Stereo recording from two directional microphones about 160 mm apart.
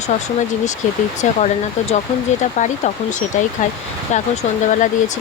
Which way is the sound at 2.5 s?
50° left (ahead or behind).